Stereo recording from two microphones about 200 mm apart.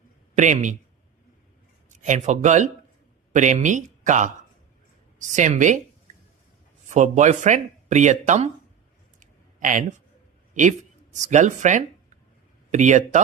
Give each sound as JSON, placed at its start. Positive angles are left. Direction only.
{"t": 0.3, "sound": "speech", "side_deg": -35}
{"t": 2.0, "sound": "speech", "side_deg": -35}
{"t": 6.9, "sound": "speech", "side_deg": -35}
{"t": 9.2, "sound": "a sound", "side_deg": -40}
{"t": 10.5, "sound": "speech", "side_deg": -35}